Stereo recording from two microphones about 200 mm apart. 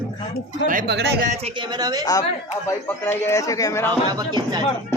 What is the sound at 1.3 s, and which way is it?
Speech, 25° right (ahead or behind).